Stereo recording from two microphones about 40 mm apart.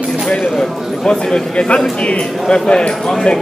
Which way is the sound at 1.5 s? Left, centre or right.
Left.